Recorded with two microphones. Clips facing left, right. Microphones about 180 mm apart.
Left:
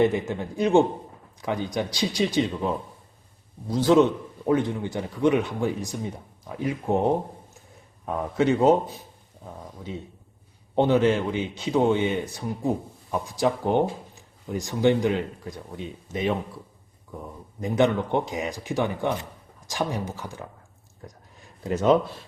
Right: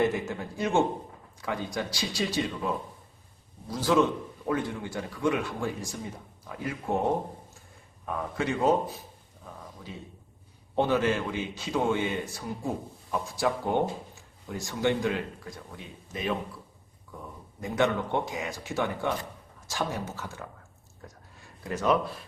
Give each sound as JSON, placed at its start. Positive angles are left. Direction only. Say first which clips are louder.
{"t": 0.0, "sound": "a man's voice", "louder": "left 5 dB", "side_deg": 20}
{"t": 3.7, "sound": "a man's voice", "louder": "left 6 dB", "side_deg": 20}
{"t": 8.0, "sound": "a man's voice", "louder": "left 7 dB", "side_deg": 20}
{"t": 10.8, "sound": "a man's voice", "louder": "left 5 dB", "side_deg": 20}
{"t": 17.6, "sound": "speech", "louder": "left 5 dB", "side_deg": 20}
{"t": 21.7, "sound": "a man's voice", "louder": "left 6 dB", "side_deg": 25}